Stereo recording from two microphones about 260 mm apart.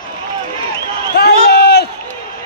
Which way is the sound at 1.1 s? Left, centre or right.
Left.